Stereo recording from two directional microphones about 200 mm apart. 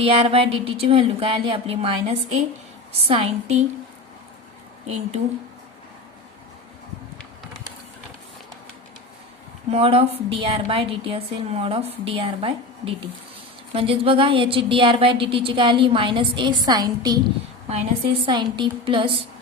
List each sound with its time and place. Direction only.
0.0 s a woman's voice: 30° right (ahead or behind)
9.6 s a woman's voice: 30° right (ahead or behind)